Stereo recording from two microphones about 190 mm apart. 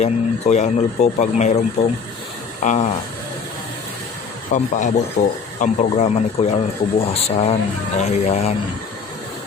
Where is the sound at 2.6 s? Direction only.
40° left (ahead or behind).